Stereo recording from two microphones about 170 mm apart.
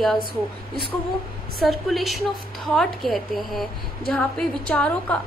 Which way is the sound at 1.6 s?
Centre (ahead or behind).